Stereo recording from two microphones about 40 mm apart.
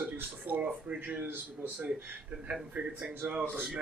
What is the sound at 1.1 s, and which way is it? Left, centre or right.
Speech, right.